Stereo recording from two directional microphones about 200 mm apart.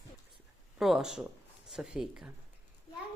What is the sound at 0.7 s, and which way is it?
Speech, centre (ahead or behind).